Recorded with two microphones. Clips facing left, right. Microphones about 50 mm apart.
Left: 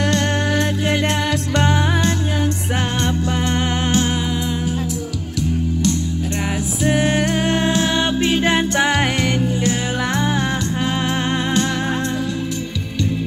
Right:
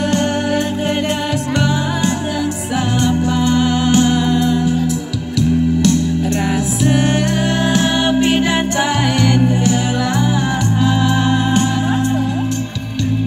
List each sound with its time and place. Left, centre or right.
1.6 s music: left
7.7 s music: right